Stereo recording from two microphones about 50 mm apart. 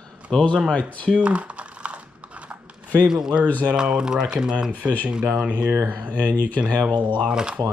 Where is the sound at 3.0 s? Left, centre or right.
Centre.